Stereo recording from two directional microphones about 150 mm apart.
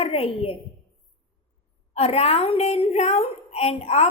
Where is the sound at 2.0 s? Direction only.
40° left (ahead or behind).